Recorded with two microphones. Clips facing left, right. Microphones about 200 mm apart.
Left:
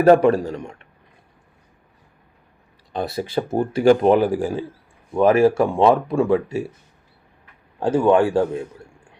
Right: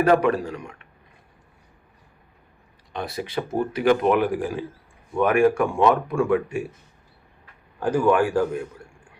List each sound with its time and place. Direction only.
0.0 s speech: 40° left (ahead or behind)
0.3 s speech: 30° left (ahead or behind)
2.9 s speech: 30° left (ahead or behind)
7.8 s speech: 25° left (ahead or behind)